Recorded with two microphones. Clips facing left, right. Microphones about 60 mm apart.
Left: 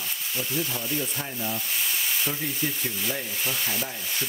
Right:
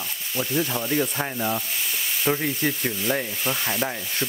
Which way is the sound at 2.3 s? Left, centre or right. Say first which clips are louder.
Right 6 dB; right.